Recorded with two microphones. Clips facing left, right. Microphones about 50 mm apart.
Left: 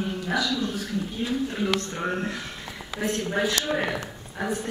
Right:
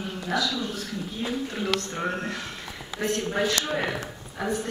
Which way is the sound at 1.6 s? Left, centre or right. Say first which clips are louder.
Left 1 dB; centre.